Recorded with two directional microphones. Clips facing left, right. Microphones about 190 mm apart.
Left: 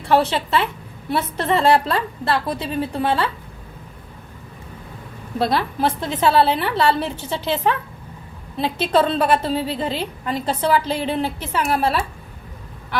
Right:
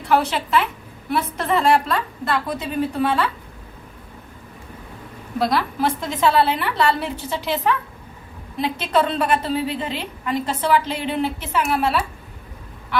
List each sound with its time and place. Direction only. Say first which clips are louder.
0.1 s a woman's voice: left 1 dB; 30° left (ahead or behind)
5.4 s a woman's voice: left 1 dB; 30° left (ahead or behind)